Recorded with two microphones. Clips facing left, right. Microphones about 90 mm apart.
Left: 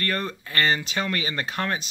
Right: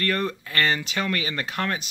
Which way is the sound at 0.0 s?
15° left (ahead or behind).